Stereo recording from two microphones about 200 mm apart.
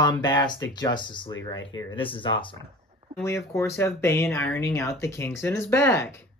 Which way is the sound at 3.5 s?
15° left (ahead or behind).